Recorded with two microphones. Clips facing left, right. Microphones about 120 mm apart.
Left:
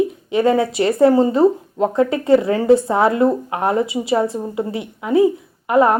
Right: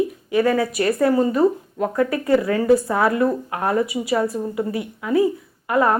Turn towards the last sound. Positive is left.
turn(degrees=20)  # may be behind; listen again after turning